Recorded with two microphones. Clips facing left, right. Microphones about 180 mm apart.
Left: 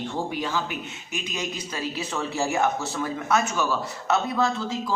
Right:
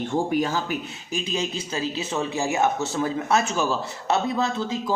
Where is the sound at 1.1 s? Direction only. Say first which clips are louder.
Right 4 dB; 30° right (ahead or behind).